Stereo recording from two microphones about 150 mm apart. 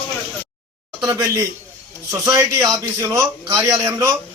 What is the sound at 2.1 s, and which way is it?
A man's voice, 20° right (ahead or behind).